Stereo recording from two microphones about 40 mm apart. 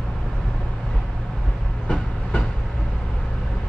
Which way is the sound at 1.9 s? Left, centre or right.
Left.